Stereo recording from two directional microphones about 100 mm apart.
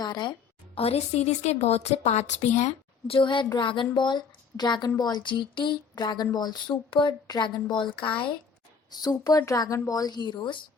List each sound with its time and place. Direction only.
0.0 s a woman's voice: 45° left (ahead or behind)
0.8 s a woman's voice: 90° left
3.1 s speech: 55° left (ahead or behind)
8.9 s a woman's voice: 40° left (ahead or behind)